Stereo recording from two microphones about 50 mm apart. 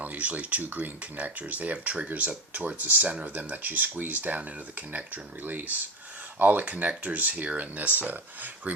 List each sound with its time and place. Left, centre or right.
0.0 s speech: right